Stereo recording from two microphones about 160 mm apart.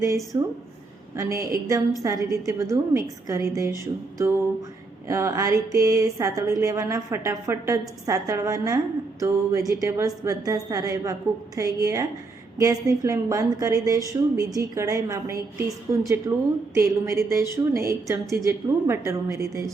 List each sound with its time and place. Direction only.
0.3 s speech: 20° right (ahead or behind)
5.0 s speech: 20° right (ahead or behind)